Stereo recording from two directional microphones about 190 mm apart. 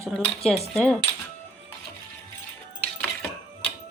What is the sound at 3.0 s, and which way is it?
Coin, 5° left (ahead or behind).